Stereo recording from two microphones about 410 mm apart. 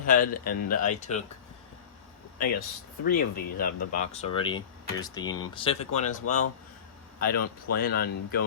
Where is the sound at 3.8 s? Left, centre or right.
Left.